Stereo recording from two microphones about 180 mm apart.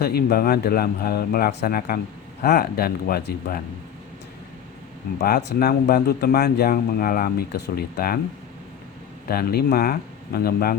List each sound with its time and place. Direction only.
0.0 s speech: 60° left (ahead or behind)
5.2 s speech: 65° left (ahead or behind)
9.3 s speech: 60° left (ahead or behind)